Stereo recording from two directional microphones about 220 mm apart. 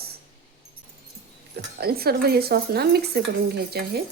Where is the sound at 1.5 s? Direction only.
45° right (ahead or behind).